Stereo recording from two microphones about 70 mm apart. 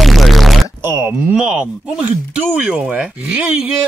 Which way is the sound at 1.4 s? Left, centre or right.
Centre.